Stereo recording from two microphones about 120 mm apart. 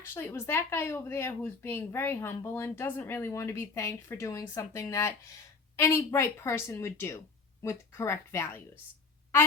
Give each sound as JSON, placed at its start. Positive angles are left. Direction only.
{"t": 0.1, "sound": "speech", "side_deg": 20}